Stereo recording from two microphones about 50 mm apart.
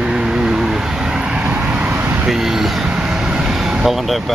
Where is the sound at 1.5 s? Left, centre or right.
Right.